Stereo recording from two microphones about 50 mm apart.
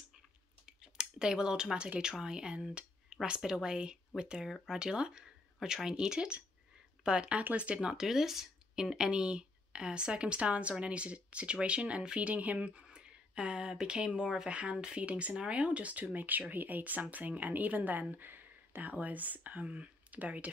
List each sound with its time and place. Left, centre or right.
0.7 s a sound: centre
2.1 s speech: centre
4.5 s speech: centre
4.7 s speech: centre
14.5 s speech: right